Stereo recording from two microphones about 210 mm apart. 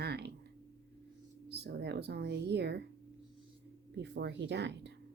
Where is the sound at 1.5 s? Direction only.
50° right (ahead or behind).